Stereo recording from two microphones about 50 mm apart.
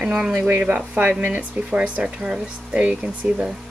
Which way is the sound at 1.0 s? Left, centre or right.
Right.